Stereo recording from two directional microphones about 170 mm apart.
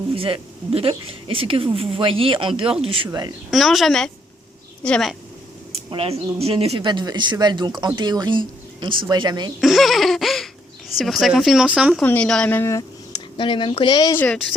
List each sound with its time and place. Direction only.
0.1 s speech: 30° right (ahead or behind)
3.5 s speech: centre (ahead or behind)
5.9 s speech: 35° right (ahead or behind)
9.6 s speech: centre (ahead or behind)
12.0 s speech: 10° left (ahead or behind); by 14.2 s 25° left (ahead or behind)